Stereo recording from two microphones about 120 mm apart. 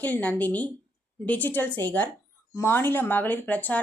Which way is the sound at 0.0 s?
10° left (ahead or behind).